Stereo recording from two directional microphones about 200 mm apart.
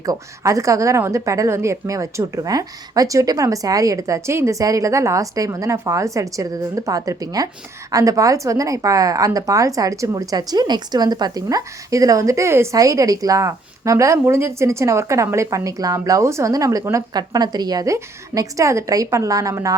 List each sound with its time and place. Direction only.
0.0 s a woman's voice: 15° right (ahead or behind)